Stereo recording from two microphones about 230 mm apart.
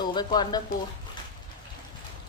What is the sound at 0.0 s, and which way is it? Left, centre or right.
Speech, centre.